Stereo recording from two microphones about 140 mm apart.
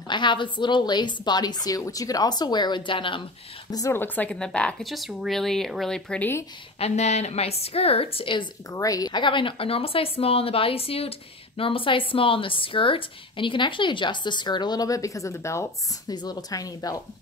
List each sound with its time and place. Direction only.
0.1 s a woman's voice: 35° left (ahead or behind)
3.7 s speech: 20° left (ahead or behind)
6.8 s a woman's voice: 50° left (ahead or behind); by 8.7 s 35° left (ahead or behind)
8.7 s a woman's voice: 25° left (ahead or behind)